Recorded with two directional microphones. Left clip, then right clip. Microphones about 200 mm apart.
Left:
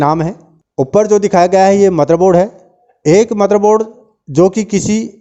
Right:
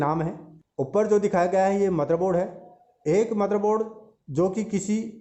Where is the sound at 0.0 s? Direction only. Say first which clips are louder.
Left 13 dB; 45° left (ahead or behind).